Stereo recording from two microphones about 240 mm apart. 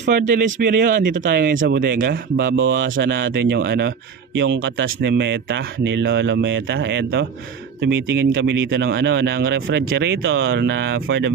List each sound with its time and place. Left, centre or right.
0.0 s speech: right
2.6 s speech: right